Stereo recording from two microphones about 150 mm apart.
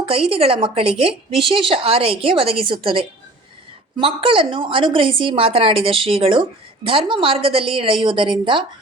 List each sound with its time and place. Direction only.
0.0 s a woman's voice: 40° right (ahead or behind)